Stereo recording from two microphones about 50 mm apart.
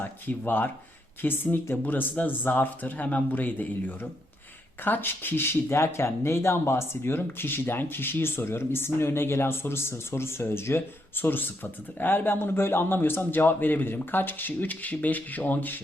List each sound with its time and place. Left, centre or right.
0.0 s speech: left